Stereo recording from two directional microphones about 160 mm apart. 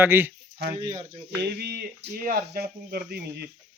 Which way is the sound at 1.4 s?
90° right.